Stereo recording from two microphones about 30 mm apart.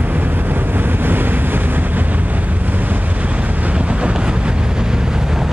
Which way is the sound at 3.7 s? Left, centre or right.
Right.